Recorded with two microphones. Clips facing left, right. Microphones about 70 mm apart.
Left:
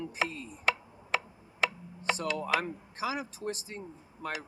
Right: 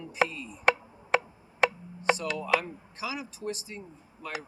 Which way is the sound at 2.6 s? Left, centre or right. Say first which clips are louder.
Left 2 dB; left.